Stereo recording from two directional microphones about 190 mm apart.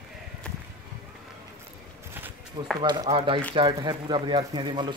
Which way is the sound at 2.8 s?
25° right (ahead or behind).